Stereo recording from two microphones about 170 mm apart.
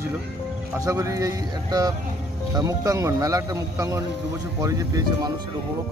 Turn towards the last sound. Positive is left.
turn(degrees=-20)  # may be behind; listen again after turning